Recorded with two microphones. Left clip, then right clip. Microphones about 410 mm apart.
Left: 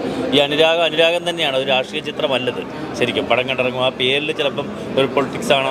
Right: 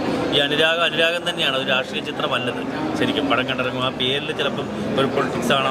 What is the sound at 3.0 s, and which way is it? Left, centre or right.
Speech, left.